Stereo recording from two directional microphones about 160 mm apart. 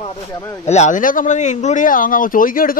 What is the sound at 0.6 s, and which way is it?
Speech, 45° left (ahead or behind).